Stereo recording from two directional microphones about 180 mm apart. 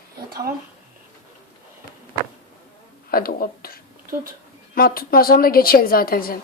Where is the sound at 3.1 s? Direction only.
55° left (ahead or behind).